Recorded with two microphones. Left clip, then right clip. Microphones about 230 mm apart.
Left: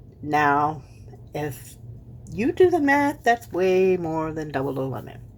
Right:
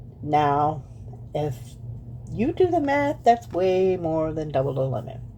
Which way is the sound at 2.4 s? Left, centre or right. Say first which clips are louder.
Left 3 dB; left.